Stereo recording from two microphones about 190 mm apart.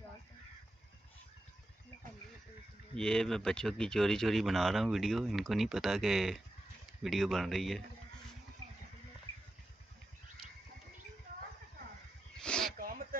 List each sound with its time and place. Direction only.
3.0 s speech: 5° left (ahead or behind)
12.4 s snake: 5° left (ahead or behind)
12.7 s a sound: 50° right (ahead or behind)